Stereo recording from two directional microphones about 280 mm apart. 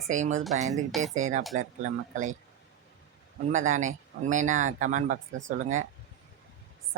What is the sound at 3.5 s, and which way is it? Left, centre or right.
Speech, right.